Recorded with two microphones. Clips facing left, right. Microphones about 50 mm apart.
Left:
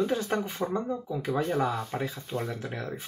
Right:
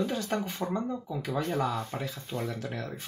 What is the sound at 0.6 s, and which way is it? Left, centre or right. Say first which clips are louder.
Speech: left 2 dB; left.